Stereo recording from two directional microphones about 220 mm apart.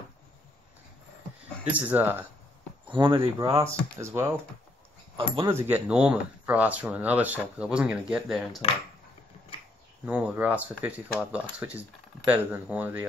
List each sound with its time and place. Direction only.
1.7 s speech: 5° right (ahead or behind)
2.9 s speech: 20° right (ahead or behind)
5.1 s speech: 25° right (ahead or behind)
5.5 s speech: 10° right (ahead or behind)
10.0 s speech: 5° right (ahead or behind)